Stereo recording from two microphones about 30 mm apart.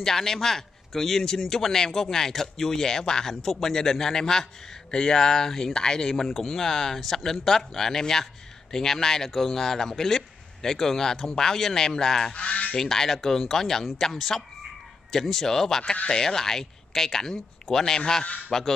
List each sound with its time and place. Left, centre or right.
0.0 s a man's voice: centre
6.2 s speech: centre
6.6 s a man's voice: centre
12.4 s speech: left
12.7 s a man's voice: centre
17.8 s a man's voice: left